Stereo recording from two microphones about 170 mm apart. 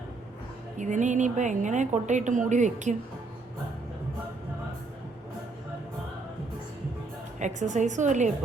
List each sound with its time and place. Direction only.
0.8 s a woman's voice: 45° right (ahead or behind)
7.3 s a woman's voice: 45° right (ahead or behind)